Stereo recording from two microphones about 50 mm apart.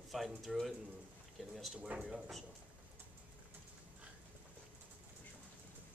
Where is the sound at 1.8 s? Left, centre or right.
Right.